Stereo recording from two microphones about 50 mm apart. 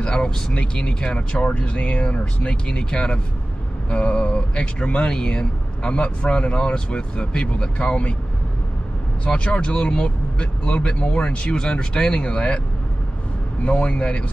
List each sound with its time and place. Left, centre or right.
0.0 s speech: centre
9.2 s speech: left
13.7 s speech: left